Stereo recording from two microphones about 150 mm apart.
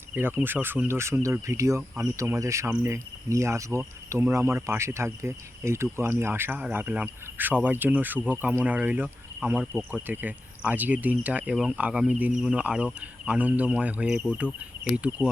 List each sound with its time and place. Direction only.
0.1 s speech: 10° right (ahead or behind)